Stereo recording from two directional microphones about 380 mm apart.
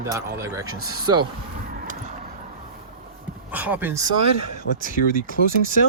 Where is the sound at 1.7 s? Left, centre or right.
Right.